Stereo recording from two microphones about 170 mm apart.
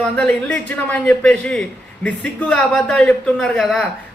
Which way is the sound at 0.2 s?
5° left (ahead or behind).